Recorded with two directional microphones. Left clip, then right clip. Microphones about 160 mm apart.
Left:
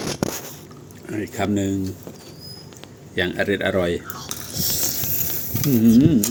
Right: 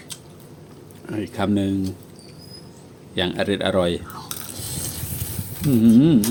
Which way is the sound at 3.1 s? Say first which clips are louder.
Left 1 dB; 25° right (ahead or behind).